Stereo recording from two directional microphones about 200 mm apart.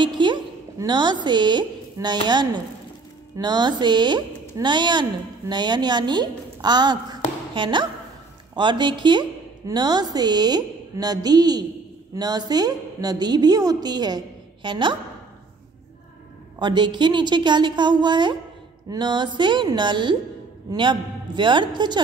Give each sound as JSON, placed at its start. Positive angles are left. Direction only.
{"t": 0.0, "sound": "a woman's voice", "side_deg": -25}
{"t": 16.5, "sound": "a woman's voice", "side_deg": -20}